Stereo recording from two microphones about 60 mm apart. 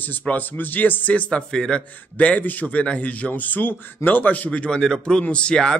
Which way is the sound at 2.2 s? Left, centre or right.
Left.